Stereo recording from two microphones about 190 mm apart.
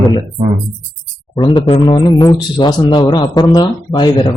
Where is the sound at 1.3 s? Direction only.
25° left (ahead or behind).